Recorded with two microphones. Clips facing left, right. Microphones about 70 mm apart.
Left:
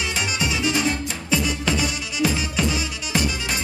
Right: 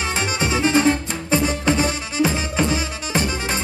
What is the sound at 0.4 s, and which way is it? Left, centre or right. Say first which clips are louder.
Music: right 6 dB; right.